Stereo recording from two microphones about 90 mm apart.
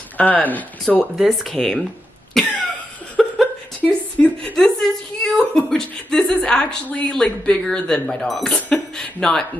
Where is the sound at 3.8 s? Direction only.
15° left (ahead or behind).